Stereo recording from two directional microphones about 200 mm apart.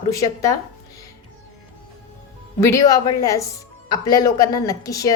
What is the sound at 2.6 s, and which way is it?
A woman's voice, 15° left (ahead or behind).